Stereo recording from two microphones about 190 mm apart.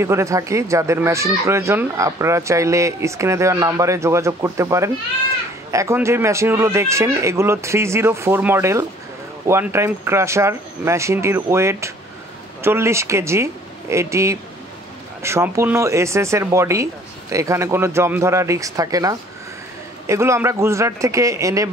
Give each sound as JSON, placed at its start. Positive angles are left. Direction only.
{"t": 0.0, "sound": "speech", "side_deg": -15}